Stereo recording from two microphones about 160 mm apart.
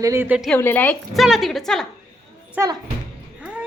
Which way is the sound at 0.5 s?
10° left (ahead or behind).